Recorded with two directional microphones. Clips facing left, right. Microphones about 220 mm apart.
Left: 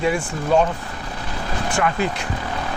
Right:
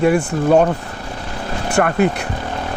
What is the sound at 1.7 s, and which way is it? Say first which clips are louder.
Speech: right 7 dB; 60° right (ahead or behind).